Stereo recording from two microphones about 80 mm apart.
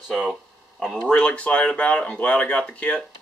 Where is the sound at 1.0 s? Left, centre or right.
Centre.